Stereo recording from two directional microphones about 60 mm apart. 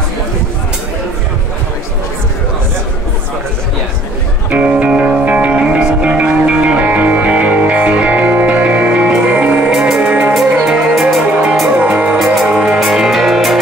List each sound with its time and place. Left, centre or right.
4.5 s music: centre
9.7 s music: centre
10.0 s music: right
10.6 s music: centre
11.8 s music: right
12.5 s music: centre